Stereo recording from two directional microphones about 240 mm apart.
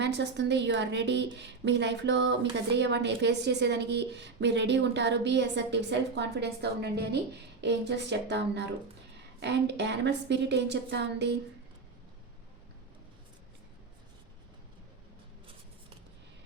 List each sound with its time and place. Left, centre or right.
0.0 s a woman's voice: right